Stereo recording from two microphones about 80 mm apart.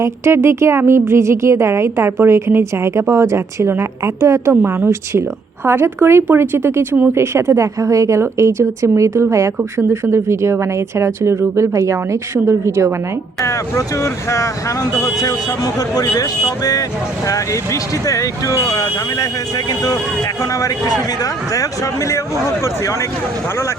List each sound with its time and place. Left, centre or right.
0.0 s speech: right
13.4 s speech: left